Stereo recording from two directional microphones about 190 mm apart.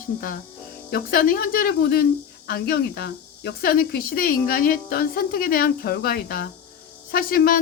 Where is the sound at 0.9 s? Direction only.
50° left (ahead or behind).